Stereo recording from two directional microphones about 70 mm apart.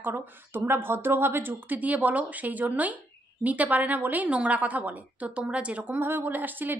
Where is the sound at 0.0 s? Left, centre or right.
Right.